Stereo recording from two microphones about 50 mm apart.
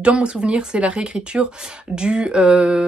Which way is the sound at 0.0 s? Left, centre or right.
Right.